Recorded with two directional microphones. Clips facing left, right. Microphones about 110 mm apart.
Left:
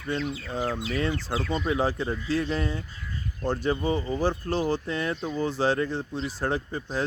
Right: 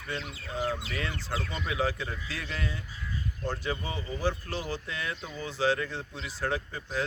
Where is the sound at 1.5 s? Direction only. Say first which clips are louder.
Left 6 dB; 35° left (ahead or behind).